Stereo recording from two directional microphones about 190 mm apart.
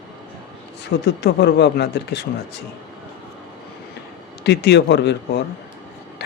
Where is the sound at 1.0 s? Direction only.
60° left (ahead or behind).